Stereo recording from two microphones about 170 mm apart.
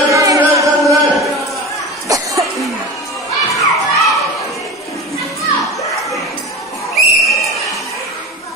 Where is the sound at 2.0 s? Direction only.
20° right (ahead or behind).